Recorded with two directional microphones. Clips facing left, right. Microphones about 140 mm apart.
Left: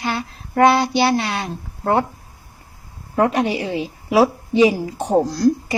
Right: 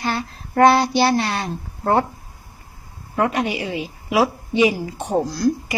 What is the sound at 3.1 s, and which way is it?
A woman's voice, 25° left (ahead or behind).